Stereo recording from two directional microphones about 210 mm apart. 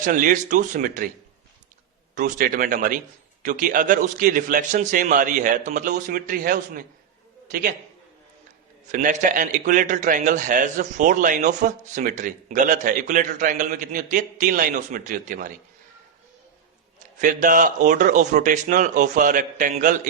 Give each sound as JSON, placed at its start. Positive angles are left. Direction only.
{"t": 0.0, "sound": "a man's voice", "side_deg": -40}
{"t": 2.1, "sound": "a man's voice", "side_deg": -40}
{"t": 8.9, "sound": "a man's voice", "side_deg": -35}
{"t": 17.2, "sound": "a man's voice", "side_deg": -40}